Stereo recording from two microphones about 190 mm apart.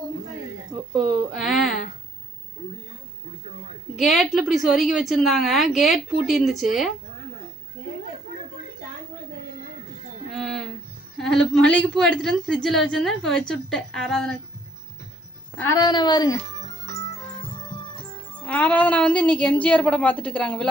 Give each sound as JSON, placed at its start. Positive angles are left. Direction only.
{"t": 0.9, "sound": "a sound", "side_deg": 0}
{"t": 3.9, "sound": "a woman's voice", "side_deg": 0}
{"t": 10.3, "sound": "a sound", "side_deg": 0}
{"t": 11.2, "sound": "a woman's voice", "side_deg": 0}
{"t": 15.5, "sound": "music", "side_deg": 15}
{"t": 18.4, "sound": "a woman's voice", "side_deg": 10}